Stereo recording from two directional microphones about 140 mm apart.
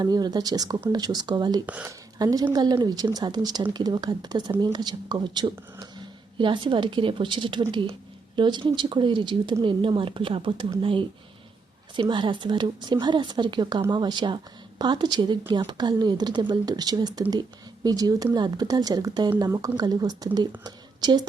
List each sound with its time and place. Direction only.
0.0 s speech: 30° right (ahead or behind)
1.6 s speech: 10° right (ahead or behind)
2.1 s speech: 30° right (ahead or behind)
20.7 s a sound: 30° right (ahead or behind)